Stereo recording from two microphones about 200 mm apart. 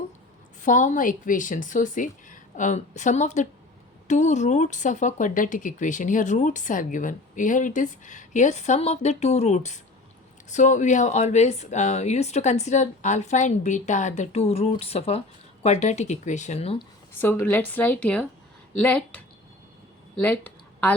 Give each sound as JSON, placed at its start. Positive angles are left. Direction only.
{"t": 0.6, "sound": "speech", "side_deg": 40}
{"t": 17.2, "sound": "speech", "side_deg": 10}
{"t": 20.2, "sound": "a sound", "side_deg": 10}